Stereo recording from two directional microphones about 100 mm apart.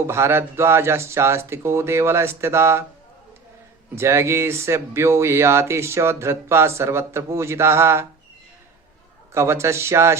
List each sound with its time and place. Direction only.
0.1 s speech: 25° right (ahead or behind)
3.9 s speech: 25° right (ahead or behind)
9.3 s speech: 30° right (ahead or behind)